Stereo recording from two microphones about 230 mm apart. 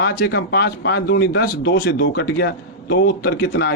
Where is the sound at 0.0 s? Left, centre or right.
Left.